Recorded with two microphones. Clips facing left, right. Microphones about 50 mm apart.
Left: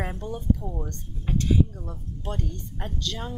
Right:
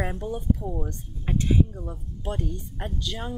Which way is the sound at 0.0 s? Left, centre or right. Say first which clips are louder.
Right 2 dB; centre.